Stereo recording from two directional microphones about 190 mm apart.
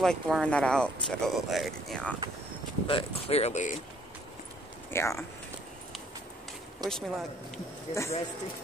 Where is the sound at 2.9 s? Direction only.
30° left (ahead or behind).